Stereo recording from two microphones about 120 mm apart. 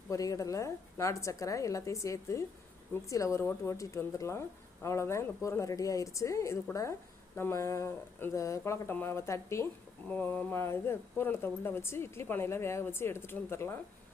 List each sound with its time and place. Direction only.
0.1 s speech: 25° left (ahead or behind)
10.1 s speech: 15° left (ahead or behind)